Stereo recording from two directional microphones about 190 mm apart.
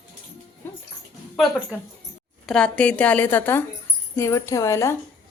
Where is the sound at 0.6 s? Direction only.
10° left (ahead or behind).